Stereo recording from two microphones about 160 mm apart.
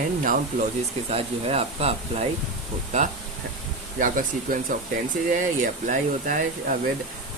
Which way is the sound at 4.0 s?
55° right (ahead or behind).